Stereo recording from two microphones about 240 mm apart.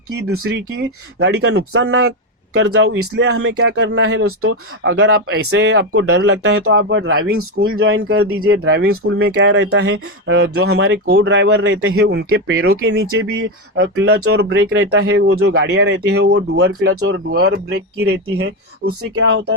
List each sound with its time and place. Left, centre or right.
0.3 s speech: right
0.8 s speech: right
9.0 s speech: right
9.3 s speech: right
12.3 s speech: right
14.7 s speech: right
16.9 s speech: right
17.3 s speech: right